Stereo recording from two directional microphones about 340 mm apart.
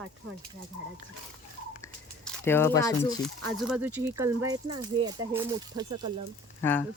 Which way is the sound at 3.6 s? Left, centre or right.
Centre.